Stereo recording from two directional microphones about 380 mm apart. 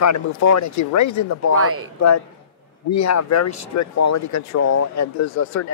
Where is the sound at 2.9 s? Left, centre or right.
Left.